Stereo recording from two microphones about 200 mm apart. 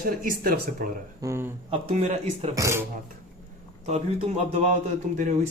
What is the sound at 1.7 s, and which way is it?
Speech, 35° right (ahead or behind).